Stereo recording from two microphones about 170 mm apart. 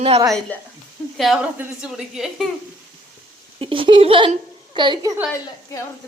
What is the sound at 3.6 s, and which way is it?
Speech, 30° right (ahead or behind).